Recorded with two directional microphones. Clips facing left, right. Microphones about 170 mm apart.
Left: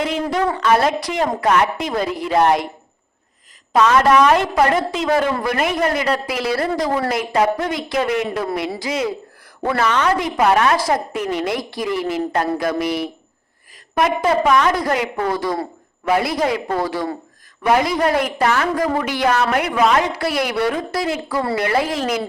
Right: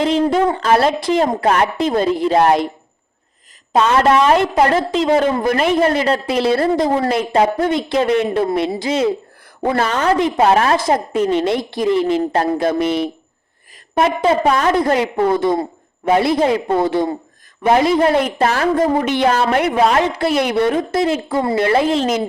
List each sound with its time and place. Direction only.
0.0 s a woman's voice: 30° right (ahead or behind)
3.7 s a woman's voice: 30° right (ahead or behind)